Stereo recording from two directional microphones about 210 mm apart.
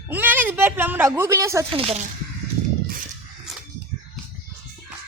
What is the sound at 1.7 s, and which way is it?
Speech, 30° right (ahead or behind).